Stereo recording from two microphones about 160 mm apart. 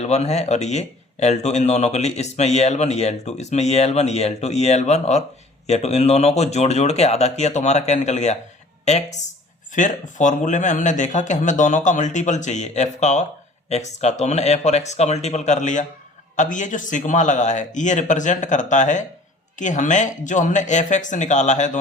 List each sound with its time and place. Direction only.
0.0 s speech: 45° left (ahead or behind)